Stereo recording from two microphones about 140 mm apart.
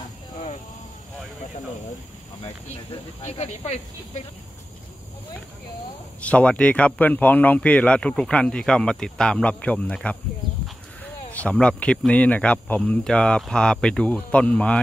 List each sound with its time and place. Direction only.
3.3 s speech: 50° left (ahead or behind)
6.2 s a man's voice: 10° left (ahead or behind)
11.3 s a man's voice: 10° left (ahead or behind)